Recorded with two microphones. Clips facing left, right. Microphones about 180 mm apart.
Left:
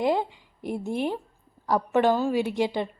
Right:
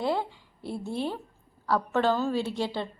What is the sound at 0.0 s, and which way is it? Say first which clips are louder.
A woman's voice: left 4 dB; 15° left (ahead or behind).